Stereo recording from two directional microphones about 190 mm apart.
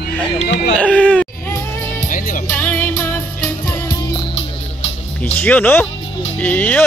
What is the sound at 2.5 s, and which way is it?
Music, 10° left (ahead or behind).